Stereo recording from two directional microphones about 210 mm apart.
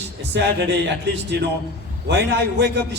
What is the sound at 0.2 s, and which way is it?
A man's voice, 55° right (ahead or behind).